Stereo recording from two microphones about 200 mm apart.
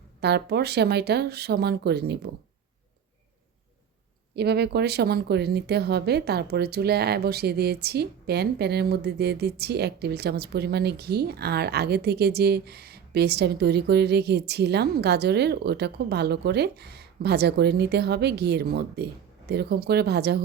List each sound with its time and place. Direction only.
0.2 s speech: 55° right (ahead or behind)
4.4 s speech: 55° right (ahead or behind)